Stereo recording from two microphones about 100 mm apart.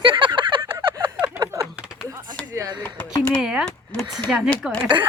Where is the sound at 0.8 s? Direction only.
30° right (ahead or behind).